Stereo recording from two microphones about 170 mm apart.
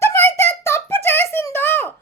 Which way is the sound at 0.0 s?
15° left (ahead or behind).